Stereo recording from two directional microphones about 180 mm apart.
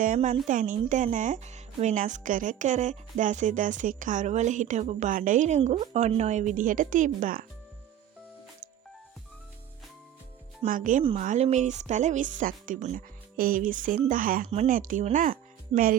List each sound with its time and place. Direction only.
0.0 s speech: 45° right (ahead or behind)
10.7 s speech: 50° right (ahead or behind)
14.4 s speech: 35° right (ahead or behind)